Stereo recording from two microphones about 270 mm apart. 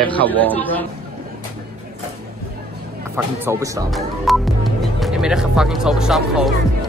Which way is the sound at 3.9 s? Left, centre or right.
Centre.